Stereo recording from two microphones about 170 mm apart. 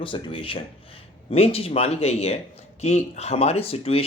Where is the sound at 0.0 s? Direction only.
30° left (ahead or behind).